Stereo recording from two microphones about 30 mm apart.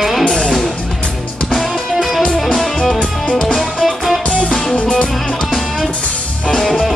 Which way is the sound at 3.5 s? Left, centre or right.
Centre.